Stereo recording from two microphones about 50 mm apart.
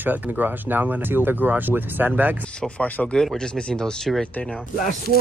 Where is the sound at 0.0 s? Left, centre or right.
Right.